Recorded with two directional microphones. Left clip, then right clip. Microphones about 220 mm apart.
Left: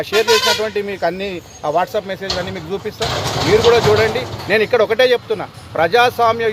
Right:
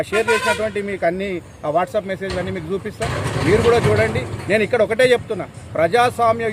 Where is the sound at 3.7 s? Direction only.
15° right (ahead or behind).